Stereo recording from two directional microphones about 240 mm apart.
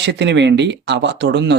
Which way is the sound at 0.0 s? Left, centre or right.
Right.